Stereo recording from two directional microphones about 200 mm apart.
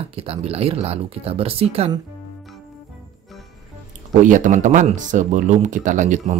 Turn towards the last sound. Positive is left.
turn(degrees=-40)  # may be behind; listen again after turning